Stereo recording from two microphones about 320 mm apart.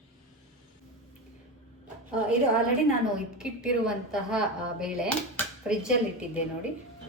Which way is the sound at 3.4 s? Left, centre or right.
Centre.